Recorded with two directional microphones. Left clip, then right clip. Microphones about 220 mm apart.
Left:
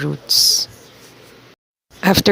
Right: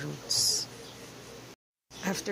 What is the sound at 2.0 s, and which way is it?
Speech, 40° left (ahead or behind).